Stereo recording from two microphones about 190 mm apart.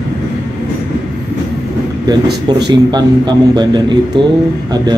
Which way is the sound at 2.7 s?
20° right (ahead or behind).